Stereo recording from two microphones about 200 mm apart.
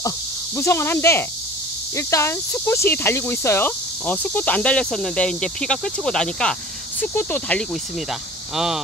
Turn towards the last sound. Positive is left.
turn(degrees=5)  # may be behind; listen again after turning